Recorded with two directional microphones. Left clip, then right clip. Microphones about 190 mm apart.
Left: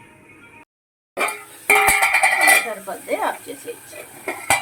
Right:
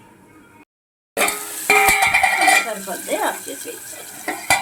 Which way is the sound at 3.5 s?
Centre (ahead or behind).